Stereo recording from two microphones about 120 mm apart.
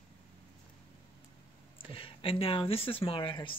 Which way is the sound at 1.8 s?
50° left (ahead or behind).